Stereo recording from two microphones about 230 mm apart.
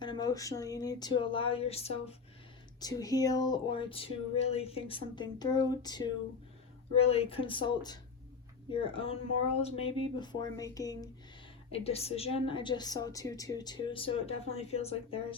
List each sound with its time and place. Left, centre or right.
0.0 s a woman's voice: centre
2.8 s a woman's voice: centre
11.7 s a woman's voice: left